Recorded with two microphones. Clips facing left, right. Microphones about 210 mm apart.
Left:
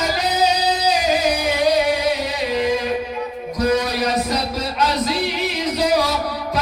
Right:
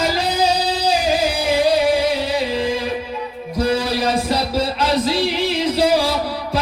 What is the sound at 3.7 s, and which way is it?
Music, 30° right (ahead or behind).